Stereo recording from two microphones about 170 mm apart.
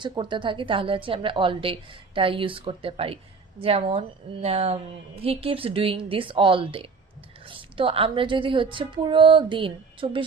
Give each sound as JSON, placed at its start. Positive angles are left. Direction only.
{"t": 0.0, "sound": "a woman's voice", "side_deg": -30}